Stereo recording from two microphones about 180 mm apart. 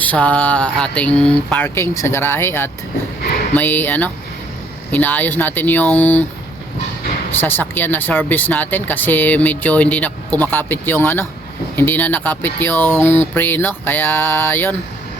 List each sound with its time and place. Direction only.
0.0 s speech: 10° left (ahead or behind)
7.3 s speech: 10° left (ahead or behind)